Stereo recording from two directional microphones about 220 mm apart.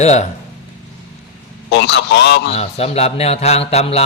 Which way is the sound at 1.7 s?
50° left (ahead or behind).